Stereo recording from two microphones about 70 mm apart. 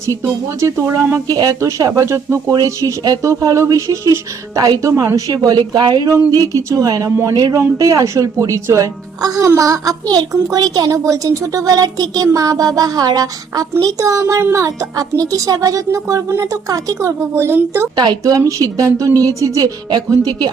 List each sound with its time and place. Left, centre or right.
0.6 s speech: right
1.3 s speech: right
1.9 s speech: right
2.6 s speech: right
6.3 s speech: right
17.9 s speech: right